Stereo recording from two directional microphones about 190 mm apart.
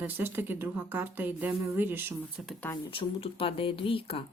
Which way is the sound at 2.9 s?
30° left (ahead or behind).